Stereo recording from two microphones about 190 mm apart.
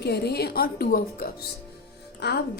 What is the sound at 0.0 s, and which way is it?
A woman's voice, 60° left (ahead or behind).